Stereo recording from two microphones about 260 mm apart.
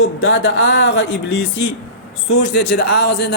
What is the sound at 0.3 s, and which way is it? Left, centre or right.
A man's voice, left.